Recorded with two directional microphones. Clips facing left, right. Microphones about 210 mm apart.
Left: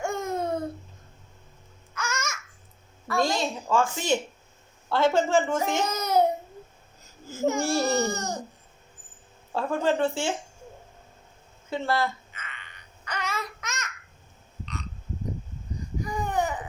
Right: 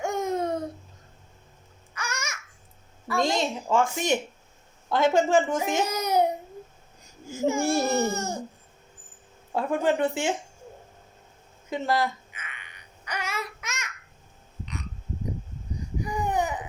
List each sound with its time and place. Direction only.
0.0 s babbling: 15° right (ahead or behind)
2.0 s babbling: 15° right (ahead or behind)
3.1 s a woman's voice: 20° right (ahead or behind)
7.3 s baby cry: 10° right (ahead or behind)
9.6 s speech: 15° right (ahead or behind)
11.7 s a sound: 15° right (ahead or behind)
14.6 s burping: 15° right (ahead or behind)
16.0 s baby cry: 10° right (ahead or behind)